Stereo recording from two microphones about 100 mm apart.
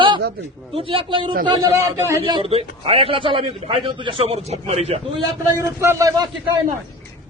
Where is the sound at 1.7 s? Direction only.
25° right (ahead or behind).